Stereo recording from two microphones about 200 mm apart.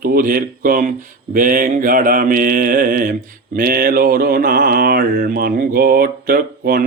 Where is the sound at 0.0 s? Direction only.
45° right (ahead or behind).